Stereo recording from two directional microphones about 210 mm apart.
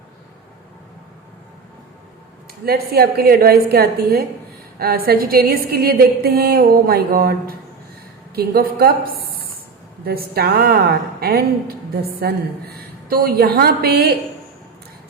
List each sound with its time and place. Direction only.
2.6 s a woman's voice: 50° right (ahead or behind)